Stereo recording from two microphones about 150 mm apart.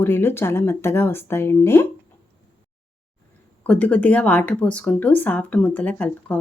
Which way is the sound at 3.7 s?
10° left (ahead or behind).